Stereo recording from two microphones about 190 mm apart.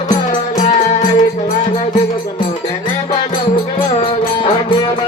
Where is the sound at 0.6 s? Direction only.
40° left (ahead or behind).